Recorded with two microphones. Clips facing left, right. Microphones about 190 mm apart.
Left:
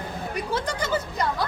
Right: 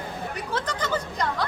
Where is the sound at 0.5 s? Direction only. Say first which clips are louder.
Left 1 dB; 10° left (ahead or behind).